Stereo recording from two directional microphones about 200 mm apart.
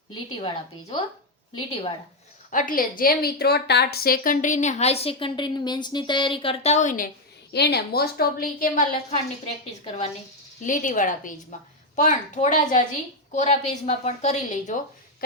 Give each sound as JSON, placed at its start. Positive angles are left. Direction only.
{"t": 0.1, "sound": "a woman's voice", "side_deg": 25}
{"t": 2.5, "sound": "a woman's voice", "side_deg": 40}
{"t": 7.5, "sound": "a woman's voice", "side_deg": 55}